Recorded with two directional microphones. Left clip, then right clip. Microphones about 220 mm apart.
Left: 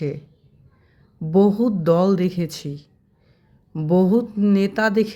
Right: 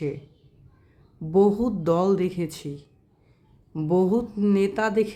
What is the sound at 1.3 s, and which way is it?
Speech, 15° left (ahead or behind).